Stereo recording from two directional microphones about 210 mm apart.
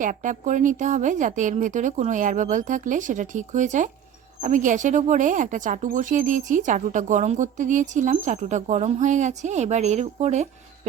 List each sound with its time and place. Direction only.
0.0 s speech: 40° right (ahead or behind)